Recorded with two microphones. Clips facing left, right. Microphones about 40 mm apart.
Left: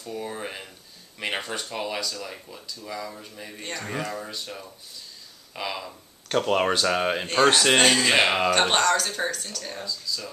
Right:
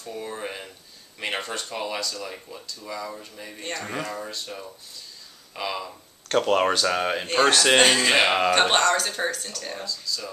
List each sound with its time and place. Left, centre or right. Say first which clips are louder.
0.0 s speech: left 1 dB; centre
0.4 s a sound: right 1 dB; centre
1.2 s speech: even; centre
7.7 s speech: right 1 dB; centre